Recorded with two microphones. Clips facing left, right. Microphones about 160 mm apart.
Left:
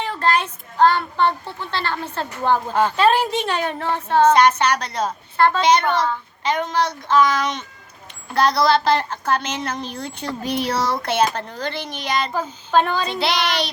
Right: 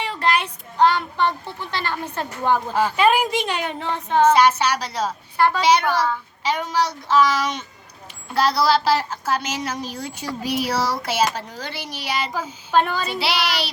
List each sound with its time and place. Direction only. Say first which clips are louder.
0.2 s a child's voice: left 1 dB; 15° right (ahead or behind)
3.8 s child singing: left 3 dB; 55° left (ahead or behind)
4.4 s a woman's voice: left 1 dB; 10° right (ahead or behind)